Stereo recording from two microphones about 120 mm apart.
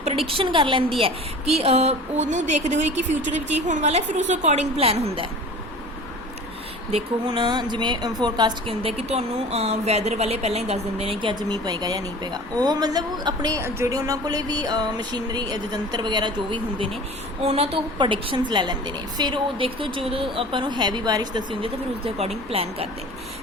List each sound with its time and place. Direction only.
0.0 s a woman's voice: 65° right (ahead or behind)
0.3 s a woman's voice: 45° right (ahead or behind)
1.5 s speech: 60° right (ahead or behind)
6.9 s music: 45° right (ahead or behind)
8.6 s a woman's voice: 50° right (ahead or behind); by 13.6 s 35° right (ahead or behind)
13.6 s music: 20° right (ahead or behind); by 16.9 s 45° right (ahead or behind)
17.4 s a woman's voice: 55° right (ahead or behind)
17.9 s a woman's voice: 45° right (ahead or behind)